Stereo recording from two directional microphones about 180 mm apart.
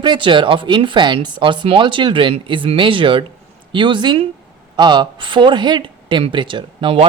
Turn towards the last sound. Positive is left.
turn(degrees=-30)  # may be behind; listen again after turning